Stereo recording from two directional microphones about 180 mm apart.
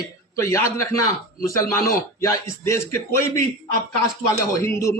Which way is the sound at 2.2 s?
15° left (ahead or behind).